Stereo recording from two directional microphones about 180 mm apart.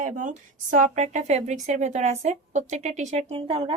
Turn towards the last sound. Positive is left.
turn(degrees=-30)  # may be behind; listen again after turning